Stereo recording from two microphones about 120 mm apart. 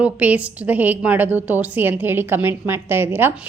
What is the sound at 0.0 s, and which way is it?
A woman's voice, 10° right (ahead or behind).